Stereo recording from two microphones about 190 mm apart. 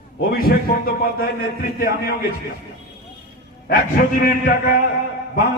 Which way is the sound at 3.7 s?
50° left (ahead or behind).